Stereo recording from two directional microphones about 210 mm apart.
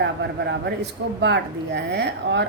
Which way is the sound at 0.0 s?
55° right (ahead or behind).